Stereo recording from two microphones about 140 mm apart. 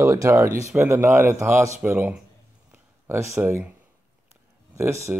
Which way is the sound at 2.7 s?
20° right (ahead or behind).